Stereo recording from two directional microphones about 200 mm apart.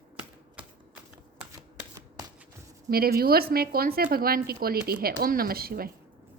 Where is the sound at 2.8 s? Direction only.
50° right (ahead or behind).